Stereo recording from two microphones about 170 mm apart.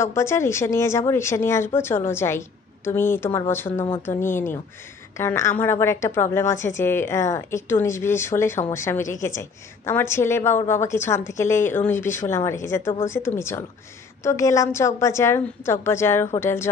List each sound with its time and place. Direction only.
0.0 s a woman's voice: 15° left (ahead or behind)